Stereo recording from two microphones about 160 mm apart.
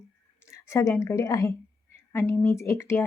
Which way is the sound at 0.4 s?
20° left (ahead or behind).